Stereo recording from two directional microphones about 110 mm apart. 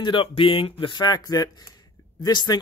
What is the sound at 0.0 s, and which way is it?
Speech, 50° left (ahead or behind).